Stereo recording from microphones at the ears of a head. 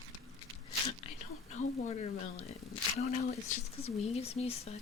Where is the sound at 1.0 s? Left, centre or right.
Left.